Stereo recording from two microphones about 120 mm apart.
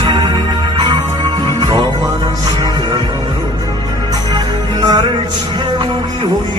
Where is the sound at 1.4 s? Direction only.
40° right (ahead or behind).